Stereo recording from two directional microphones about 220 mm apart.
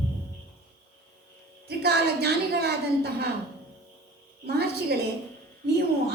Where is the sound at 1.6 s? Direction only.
45° right (ahead or behind).